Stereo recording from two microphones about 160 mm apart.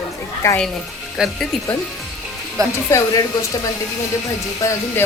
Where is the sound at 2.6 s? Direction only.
20° right (ahead or behind).